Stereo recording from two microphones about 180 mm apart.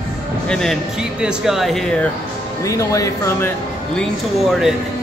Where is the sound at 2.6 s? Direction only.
15° left (ahead or behind); by 4.7 s centre (ahead or behind).